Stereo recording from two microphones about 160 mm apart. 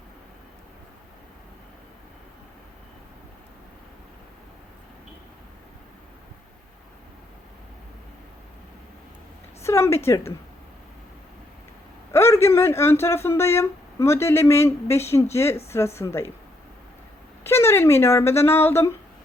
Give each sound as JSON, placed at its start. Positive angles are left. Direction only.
{"t": 9.6, "sound": "a woman's voice", "side_deg": 15}
{"t": 12.1, "sound": "speech", "side_deg": 15}
{"t": 17.4, "sound": "speech", "side_deg": 15}